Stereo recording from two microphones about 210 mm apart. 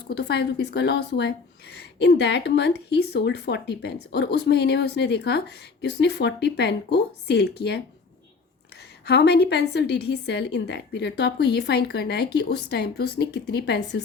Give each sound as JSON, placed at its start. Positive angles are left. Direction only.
{"t": 0.1, "sound": "speech", "side_deg": 50}